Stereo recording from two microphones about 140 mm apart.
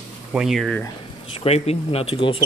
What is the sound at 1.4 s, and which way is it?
Speech, 50° left (ahead or behind).